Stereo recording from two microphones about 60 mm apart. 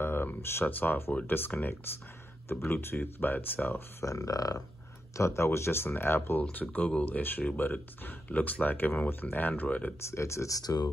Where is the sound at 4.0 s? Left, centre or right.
Left.